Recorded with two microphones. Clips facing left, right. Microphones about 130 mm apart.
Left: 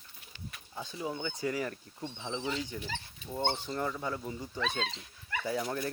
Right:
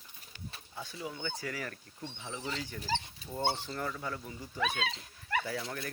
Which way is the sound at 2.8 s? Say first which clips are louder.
Right 5 dB; 35° right (ahead or behind).